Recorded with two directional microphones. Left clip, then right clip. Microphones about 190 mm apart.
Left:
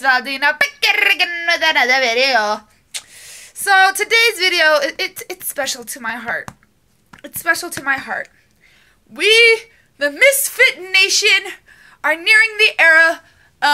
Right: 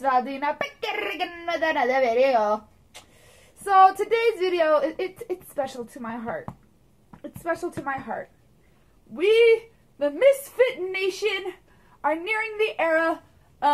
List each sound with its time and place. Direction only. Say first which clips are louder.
0.0 s a woman's voice: left 8 dB; 15° left (ahead or behind)
3.6 s a woman's voice: left 4 dB; 15° left (ahead or behind)
7.8 s speech: left 10 dB; 20° left (ahead or behind)
9.1 s a woman's voice: left 7 dB; 10° left (ahead or behind)